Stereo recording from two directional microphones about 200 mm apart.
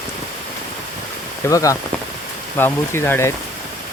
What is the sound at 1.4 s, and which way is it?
Speech, 15° left (ahead or behind).